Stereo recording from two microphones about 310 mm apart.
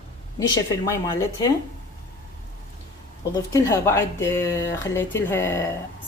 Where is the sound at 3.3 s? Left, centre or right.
Centre.